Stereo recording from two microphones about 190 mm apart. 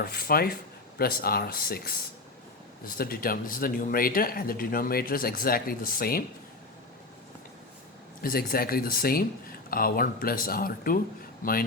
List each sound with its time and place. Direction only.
0.0 s speech: 50° left (ahead or behind)
8.2 s speech: 50° left (ahead or behind)